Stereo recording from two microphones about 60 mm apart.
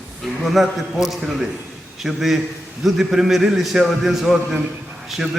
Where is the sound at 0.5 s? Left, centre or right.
Centre.